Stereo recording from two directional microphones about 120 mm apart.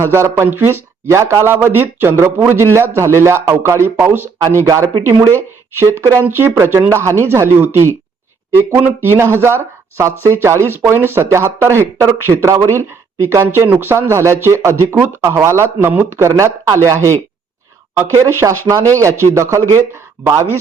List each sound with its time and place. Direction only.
0.0 s speech: 25° right (ahead or behind)